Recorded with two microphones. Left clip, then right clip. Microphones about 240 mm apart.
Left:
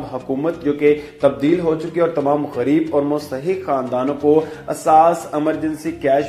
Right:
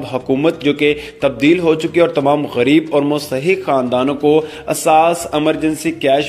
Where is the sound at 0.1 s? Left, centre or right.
Right.